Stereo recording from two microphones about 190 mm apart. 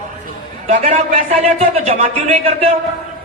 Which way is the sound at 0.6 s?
35° right (ahead or behind).